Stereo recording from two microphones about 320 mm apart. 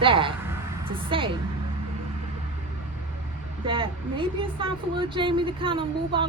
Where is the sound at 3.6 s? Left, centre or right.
Centre.